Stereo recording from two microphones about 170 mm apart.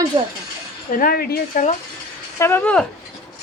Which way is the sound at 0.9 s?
55° left (ahead or behind).